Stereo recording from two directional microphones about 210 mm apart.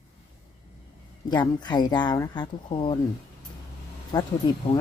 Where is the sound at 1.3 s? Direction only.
20° left (ahead or behind).